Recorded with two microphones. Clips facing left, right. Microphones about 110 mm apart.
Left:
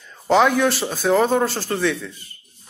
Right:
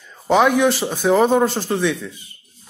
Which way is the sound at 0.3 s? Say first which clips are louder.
Right 1 dB; 10° right (ahead or behind).